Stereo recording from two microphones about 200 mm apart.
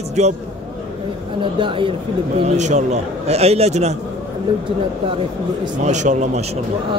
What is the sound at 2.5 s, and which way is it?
A man's voice, 35° right (ahead or behind).